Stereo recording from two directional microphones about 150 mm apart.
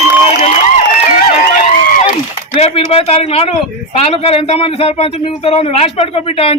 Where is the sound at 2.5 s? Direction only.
40° left (ahead or behind).